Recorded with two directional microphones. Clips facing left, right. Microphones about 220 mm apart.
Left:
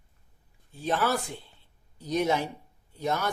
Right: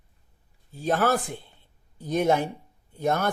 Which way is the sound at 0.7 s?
40° right (ahead or behind).